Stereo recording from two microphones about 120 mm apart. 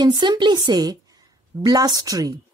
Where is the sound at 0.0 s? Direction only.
35° right (ahead or behind).